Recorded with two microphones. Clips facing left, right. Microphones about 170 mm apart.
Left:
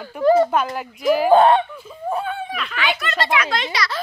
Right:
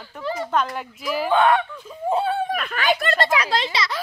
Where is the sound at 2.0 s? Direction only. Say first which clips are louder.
Right 3 dB; 30° right (ahead or behind).